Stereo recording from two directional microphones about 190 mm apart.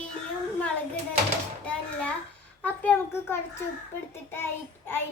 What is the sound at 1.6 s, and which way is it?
Speech, 5° left (ahead or behind).